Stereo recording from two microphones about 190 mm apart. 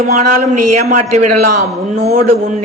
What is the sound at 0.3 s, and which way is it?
A woman's voice, 40° right (ahead or behind).